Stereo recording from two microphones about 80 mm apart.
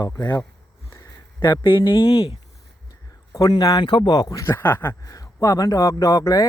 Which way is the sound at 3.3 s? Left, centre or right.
Left.